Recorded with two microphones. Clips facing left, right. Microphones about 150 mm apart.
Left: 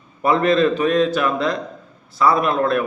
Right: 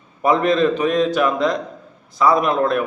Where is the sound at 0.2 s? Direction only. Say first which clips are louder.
Even; 15° right (ahead or behind).